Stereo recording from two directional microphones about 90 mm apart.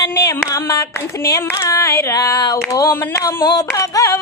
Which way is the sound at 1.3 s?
40° left (ahead or behind).